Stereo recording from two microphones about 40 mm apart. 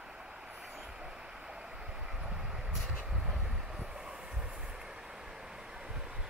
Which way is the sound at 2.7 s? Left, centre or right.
Centre.